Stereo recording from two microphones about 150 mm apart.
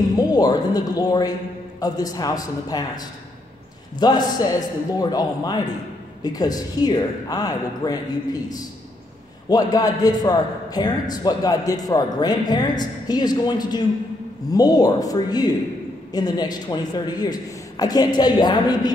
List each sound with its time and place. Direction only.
0.1 s a man's voice: 25° left (ahead or behind)